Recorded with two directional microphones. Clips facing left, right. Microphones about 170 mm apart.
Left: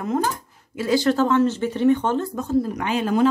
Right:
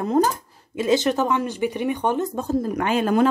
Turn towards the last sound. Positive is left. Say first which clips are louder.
# right 2 dB
turn(degrees=-55)  # may be behind; listen again after turning